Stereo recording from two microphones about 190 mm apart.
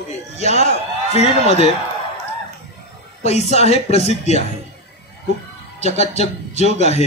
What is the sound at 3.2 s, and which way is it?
A man's voice, 35° left (ahead or behind).